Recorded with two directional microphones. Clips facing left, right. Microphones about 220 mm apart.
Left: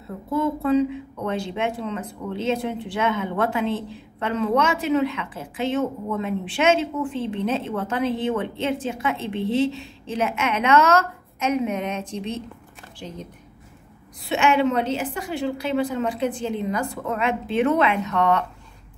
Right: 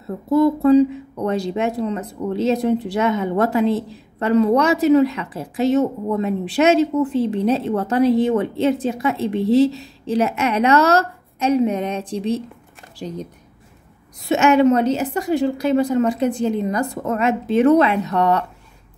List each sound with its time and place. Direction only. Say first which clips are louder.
0.3 s speech: right 8 dB; 40° right (ahead or behind)
14.2 s speech: right 6 dB; 40° right (ahead or behind)